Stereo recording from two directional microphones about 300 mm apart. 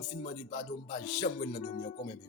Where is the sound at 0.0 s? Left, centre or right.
Left.